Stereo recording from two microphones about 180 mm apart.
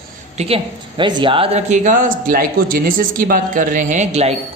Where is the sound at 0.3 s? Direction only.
30° right (ahead or behind).